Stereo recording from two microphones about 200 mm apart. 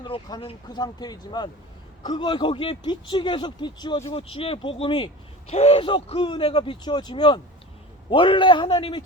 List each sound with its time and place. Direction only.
0.0 s speech: 25° left (ahead or behind)